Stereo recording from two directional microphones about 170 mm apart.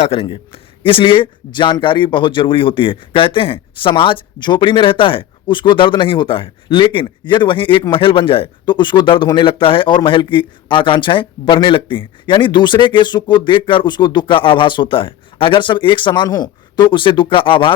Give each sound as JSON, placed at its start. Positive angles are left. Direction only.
{"t": 0.0, "sound": "a man's voice", "side_deg": 35}